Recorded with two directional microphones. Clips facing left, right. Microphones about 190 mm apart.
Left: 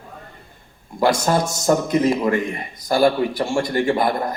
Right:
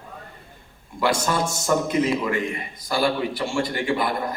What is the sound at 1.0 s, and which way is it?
A man's voice, 40° left (ahead or behind).